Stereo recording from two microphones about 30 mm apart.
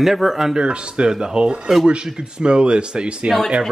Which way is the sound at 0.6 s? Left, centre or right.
Right.